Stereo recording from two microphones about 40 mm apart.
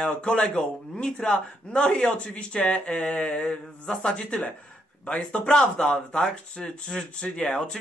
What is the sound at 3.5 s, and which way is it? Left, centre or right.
Speech, left.